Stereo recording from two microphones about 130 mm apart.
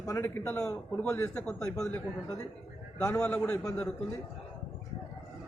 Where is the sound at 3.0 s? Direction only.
15° left (ahead or behind).